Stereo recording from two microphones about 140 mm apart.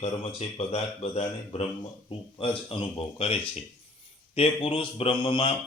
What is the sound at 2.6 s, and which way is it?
A man's voice, 40° left (ahead or behind).